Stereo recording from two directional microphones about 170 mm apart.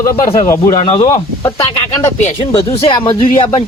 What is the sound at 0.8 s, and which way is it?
Speech, 35° left (ahead or behind).